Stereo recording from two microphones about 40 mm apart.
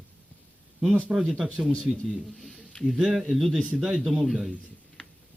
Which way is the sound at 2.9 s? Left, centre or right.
Centre.